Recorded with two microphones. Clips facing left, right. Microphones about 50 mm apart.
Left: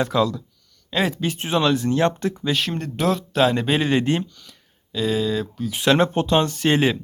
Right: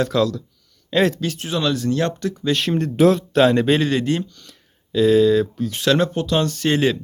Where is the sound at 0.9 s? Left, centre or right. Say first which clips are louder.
Right 5 dB; centre.